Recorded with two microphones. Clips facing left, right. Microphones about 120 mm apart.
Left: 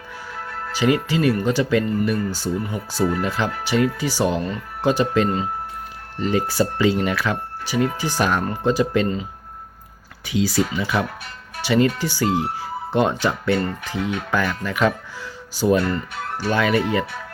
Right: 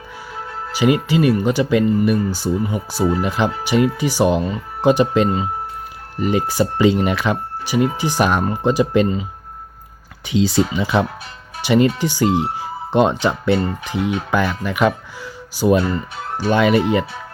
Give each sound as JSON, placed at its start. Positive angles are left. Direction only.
{"t": 0.7, "sound": "speech", "side_deg": -15}
{"t": 10.2, "sound": "speech", "side_deg": -25}